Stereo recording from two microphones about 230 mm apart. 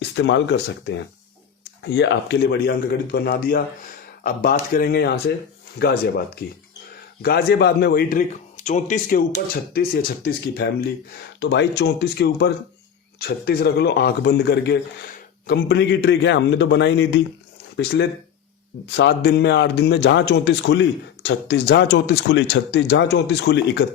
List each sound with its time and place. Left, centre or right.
0.2 s a man's voice: left